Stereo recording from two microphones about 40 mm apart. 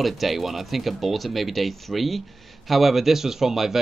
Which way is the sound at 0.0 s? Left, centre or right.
Centre.